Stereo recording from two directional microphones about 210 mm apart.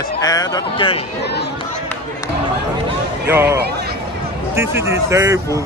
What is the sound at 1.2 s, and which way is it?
Speech, 55° left (ahead or behind).